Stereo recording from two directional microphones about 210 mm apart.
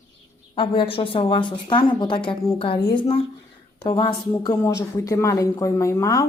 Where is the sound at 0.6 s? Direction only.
25° left (ahead or behind).